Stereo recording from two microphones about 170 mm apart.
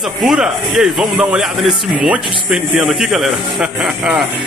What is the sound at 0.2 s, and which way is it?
Speech, centre (ahead or behind).